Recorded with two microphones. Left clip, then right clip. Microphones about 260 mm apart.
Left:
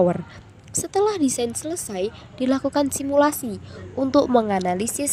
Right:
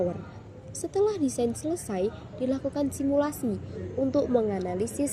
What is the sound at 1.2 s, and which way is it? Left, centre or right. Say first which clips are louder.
Speech: left 4 dB; left.